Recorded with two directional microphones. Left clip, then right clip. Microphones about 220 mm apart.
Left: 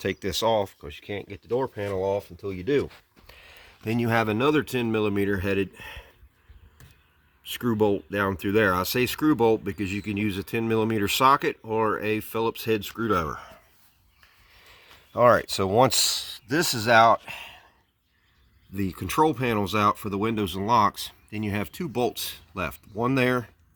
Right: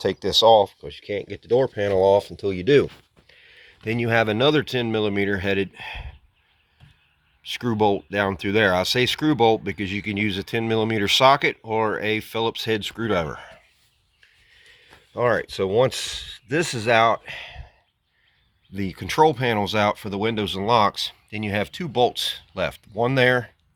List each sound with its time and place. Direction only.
0.2 s speech: 20° left (ahead or behind)
1.5 s speech: centre (ahead or behind)
2.0 s speech: 20° right (ahead or behind)
3.2 s a sound: 30° left (ahead or behind)
3.9 s speech: 15° left (ahead or behind)
7.7 s speech: 5° left (ahead or behind)
13.3 s a sound: 20° left (ahead or behind)
15.1 s speech: 35° left (ahead or behind)
17.3 s a sound: 10° left (ahead or behind)
18.7 s speech: 10° left (ahead or behind)